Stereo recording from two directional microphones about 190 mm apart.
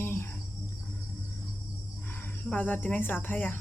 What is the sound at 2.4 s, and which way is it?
Speech, 10° left (ahead or behind).